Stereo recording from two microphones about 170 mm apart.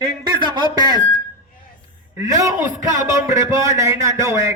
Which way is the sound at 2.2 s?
20° right (ahead or behind).